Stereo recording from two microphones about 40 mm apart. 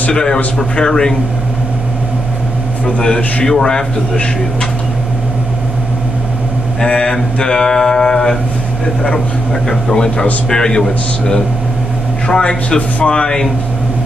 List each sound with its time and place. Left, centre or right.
0.1 s a man's voice: centre
0.6 s mantra: centre
3.4 s mantra: centre
7.1 s mantra: centre
9.9 s a man's voice: left
12.6 s a man's voice: left